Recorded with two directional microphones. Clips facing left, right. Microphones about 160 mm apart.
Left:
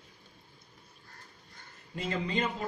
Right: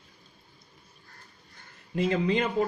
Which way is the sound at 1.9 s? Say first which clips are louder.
Right 7 dB; 60° right (ahead or behind).